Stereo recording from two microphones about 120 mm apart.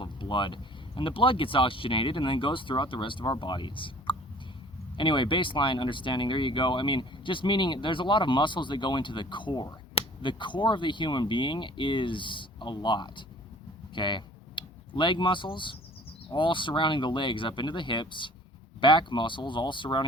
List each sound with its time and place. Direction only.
0.0 s speech: 45° left (ahead or behind)